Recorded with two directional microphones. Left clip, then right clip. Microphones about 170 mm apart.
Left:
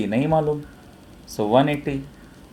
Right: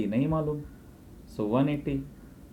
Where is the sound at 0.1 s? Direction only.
60° left (ahead or behind).